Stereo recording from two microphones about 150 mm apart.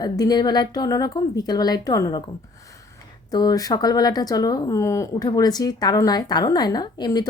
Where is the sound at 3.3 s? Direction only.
25° left (ahead or behind).